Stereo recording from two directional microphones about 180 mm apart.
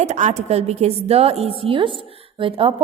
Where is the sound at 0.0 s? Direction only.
40° right (ahead or behind).